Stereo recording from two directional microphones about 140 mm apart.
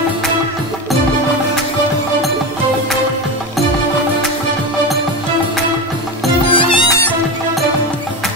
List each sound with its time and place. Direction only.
6.5 s music: 35° left (ahead or behind)
6.9 s music: 15° left (ahead or behind)